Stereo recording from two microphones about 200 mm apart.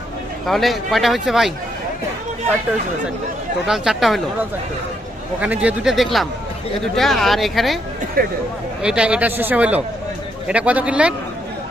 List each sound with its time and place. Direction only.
0.4 s a man's voice: centre (ahead or behind)
3.7 s a man's voice: centre (ahead or behind)
5.4 s a man's voice: 5° right (ahead or behind)
8.2 s speech: 45° right (ahead or behind)
8.8 s a man's voice: 5° right (ahead or behind)